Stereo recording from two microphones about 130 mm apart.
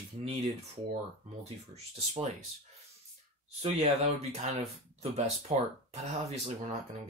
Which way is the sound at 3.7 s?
60° right (ahead or behind).